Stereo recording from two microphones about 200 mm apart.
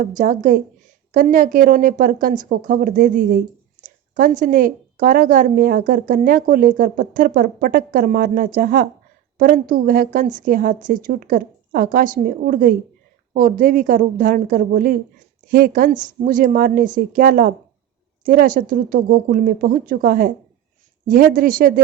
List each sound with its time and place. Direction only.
0.0 s a woman's voice: 40° right (ahead or behind)